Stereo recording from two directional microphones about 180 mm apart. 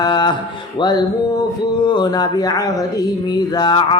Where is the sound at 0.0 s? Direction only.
25° left (ahead or behind).